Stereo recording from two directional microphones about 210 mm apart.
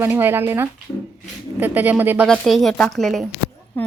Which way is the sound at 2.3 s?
Centre (ahead or behind).